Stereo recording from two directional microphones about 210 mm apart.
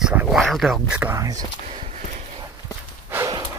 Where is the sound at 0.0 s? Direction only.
5° right (ahead or behind).